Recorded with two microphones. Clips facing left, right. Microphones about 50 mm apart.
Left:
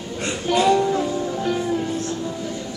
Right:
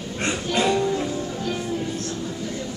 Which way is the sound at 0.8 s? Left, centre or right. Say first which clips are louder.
Left 3 dB; centre.